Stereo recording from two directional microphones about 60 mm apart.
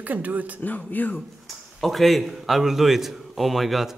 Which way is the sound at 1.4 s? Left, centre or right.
Centre.